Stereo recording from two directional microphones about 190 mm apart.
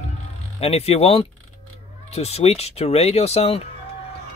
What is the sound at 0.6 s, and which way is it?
Speech, 35° left (ahead or behind).